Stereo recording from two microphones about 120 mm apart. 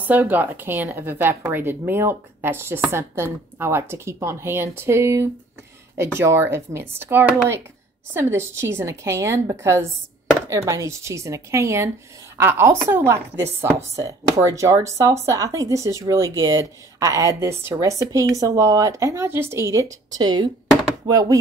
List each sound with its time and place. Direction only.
0.0 s a woman's voice: 15° right (ahead or behind); by 21.4 s 35° right (ahead or behind)